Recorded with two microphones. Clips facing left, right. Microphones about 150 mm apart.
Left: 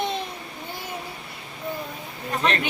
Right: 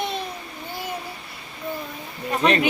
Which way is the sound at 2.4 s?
15° right (ahead or behind).